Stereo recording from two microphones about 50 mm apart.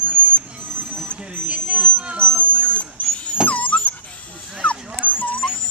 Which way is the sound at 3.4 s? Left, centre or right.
Left.